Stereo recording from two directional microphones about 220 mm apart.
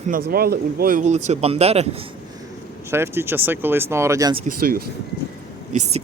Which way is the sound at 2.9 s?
10° right (ahead or behind).